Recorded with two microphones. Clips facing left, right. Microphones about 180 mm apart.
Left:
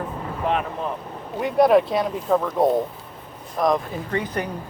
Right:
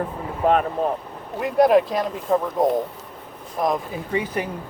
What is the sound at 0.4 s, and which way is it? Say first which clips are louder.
Speech: right 6 dB; 45° right (ahead or behind).